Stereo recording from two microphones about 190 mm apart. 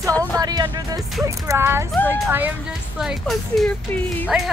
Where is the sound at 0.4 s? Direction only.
20° right (ahead or behind).